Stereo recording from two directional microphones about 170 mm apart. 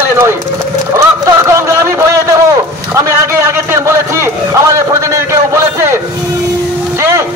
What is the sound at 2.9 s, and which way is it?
A man's voice, 15° right (ahead or behind).